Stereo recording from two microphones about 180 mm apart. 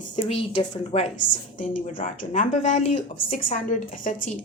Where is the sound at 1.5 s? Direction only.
45° left (ahead or behind).